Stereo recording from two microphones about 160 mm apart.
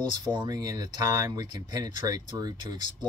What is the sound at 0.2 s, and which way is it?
Speech, 25° right (ahead or behind).